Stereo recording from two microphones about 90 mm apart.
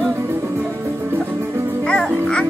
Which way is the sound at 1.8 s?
10° left (ahead or behind).